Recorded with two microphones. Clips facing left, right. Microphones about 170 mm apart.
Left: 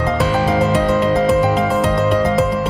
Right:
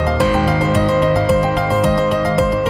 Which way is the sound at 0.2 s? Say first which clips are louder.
Even; centre (ahead or behind).